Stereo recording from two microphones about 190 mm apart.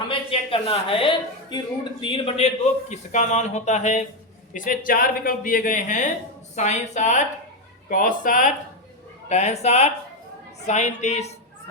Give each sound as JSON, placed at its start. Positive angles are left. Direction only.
{"t": 0.1, "sound": "a woman's voice", "side_deg": 30}